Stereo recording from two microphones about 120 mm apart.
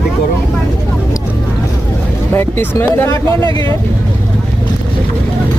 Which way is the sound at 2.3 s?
20° left (ahead or behind).